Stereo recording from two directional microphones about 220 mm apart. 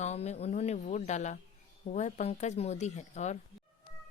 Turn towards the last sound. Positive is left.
turn(degrees=30)  # may be behind; listen again after turning